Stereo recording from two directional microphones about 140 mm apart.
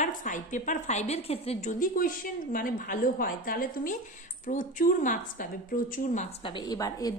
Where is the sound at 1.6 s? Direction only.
75° left (ahead or behind).